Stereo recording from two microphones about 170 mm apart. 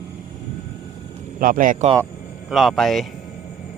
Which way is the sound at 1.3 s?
55° right (ahead or behind).